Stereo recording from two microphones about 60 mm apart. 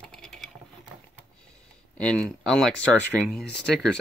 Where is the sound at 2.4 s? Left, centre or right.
Centre.